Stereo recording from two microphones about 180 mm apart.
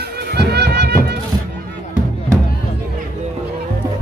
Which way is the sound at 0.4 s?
65° right (ahead or behind).